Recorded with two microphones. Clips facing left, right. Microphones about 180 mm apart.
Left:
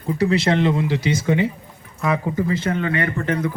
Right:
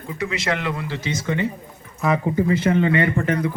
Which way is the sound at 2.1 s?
20° right (ahead or behind).